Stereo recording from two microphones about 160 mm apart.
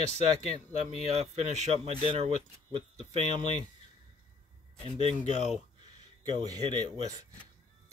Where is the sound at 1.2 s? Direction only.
45° right (ahead or behind).